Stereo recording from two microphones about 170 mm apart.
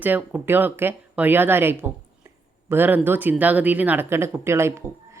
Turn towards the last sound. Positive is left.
turn(degrees=-15)  # may be behind; listen again after turning